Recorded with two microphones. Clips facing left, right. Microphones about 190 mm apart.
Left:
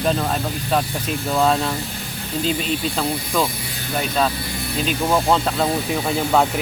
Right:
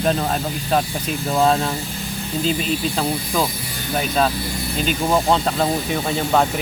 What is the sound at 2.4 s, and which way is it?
Speech, centre (ahead or behind).